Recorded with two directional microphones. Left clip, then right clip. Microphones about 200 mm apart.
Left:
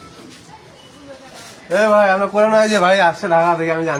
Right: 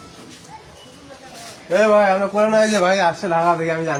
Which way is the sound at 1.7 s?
5° left (ahead or behind).